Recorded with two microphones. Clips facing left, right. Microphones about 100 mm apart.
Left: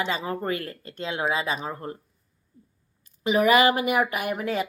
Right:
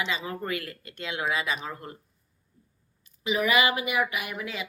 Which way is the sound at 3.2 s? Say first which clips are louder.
Left 5 dB; 45° left (ahead or behind).